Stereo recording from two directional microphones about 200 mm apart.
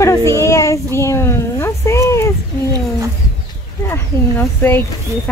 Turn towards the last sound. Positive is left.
turn(degrees=10)  # may be behind; listen again after turning